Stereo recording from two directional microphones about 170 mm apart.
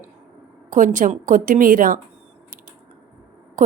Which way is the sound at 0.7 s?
50° right (ahead or behind).